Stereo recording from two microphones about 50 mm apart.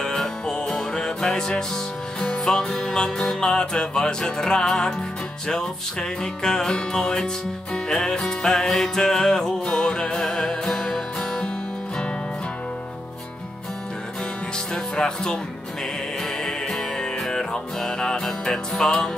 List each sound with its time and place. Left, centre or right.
0.0 s music: centre
14.7 s music: centre
16.4 s music: centre